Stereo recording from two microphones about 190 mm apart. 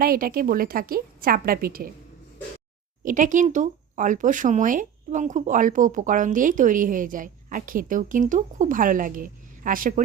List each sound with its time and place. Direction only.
0.0 s speech: 50° right (ahead or behind)
3.0 s speech: 45° right (ahead or behind)